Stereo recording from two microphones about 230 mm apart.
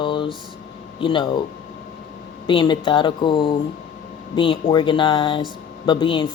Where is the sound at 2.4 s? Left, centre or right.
Left.